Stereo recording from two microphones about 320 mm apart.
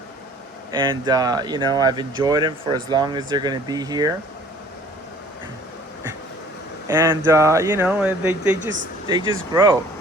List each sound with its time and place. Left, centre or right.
0.7 s speech: centre
6.8 s speech: centre